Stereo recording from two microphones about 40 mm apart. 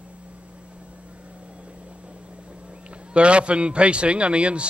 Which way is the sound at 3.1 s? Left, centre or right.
Right.